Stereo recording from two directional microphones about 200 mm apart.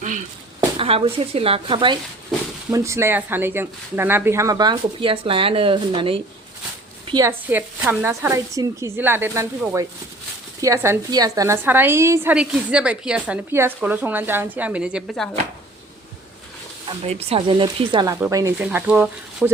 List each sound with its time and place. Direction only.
0.8 s speech: 30° right (ahead or behind)
2.7 s a woman's voice: 15° right (ahead or behind)
7.1 s a woman's voice: 15° right (ahead or behind); by 15.3 s centre (ahead or behind)
17.0 s a woman's voice: 30° right (ahead or behind); by 19.5 s 5° right (ahead or behind)